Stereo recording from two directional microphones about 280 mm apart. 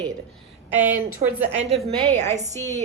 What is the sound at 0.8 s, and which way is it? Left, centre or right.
Speech, centre.